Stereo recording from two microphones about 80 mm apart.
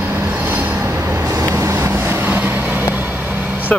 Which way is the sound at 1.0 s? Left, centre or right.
Right.